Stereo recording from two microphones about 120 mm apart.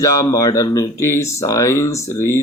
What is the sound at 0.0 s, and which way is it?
A man's voice, 30° left (ahead or behind).